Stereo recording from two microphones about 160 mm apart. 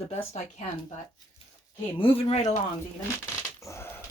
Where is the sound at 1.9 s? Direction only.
35° left (ahead or behind).